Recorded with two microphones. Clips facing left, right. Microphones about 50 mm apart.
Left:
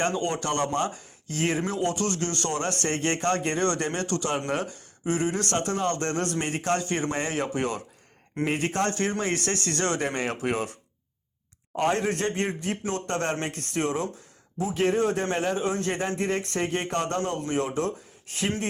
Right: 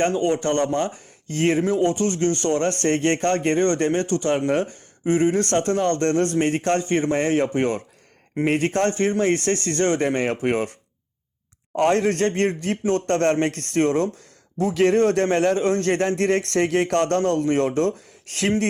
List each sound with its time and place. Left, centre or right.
0.0 s a man's voice: right
6.8 s a man's voice: right
11.8 s a man's voice: right
14.7 s speech: right
15.4 s a man's voice: right
15.6 s speech: right
18.3 s speech: right